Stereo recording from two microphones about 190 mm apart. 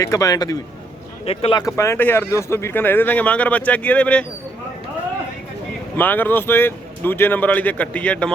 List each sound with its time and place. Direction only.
0.0 s speech: 20° left (ahead or behind)
1.2 s speech: 30° left (ahead or behind); by 4.3 s 5° left (ahead or behind)
6.0 s speech: 10° left (ahead or behind)